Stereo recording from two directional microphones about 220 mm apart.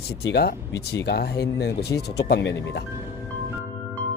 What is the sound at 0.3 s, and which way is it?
Speech, 45° left (ahead or behind).